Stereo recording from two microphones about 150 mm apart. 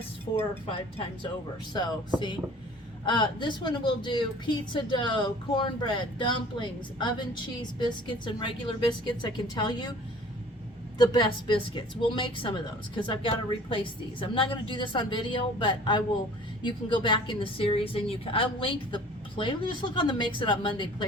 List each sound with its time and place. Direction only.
0.3 s speech: 25° left (ahead or behind)
0.7 s a woman's voice: 35° left (ahead or behind)
10.9 s a woman's voice: 30° left (ahead or behind)